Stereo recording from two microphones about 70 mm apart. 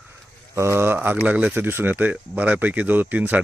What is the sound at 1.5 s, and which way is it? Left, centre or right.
Speech, right.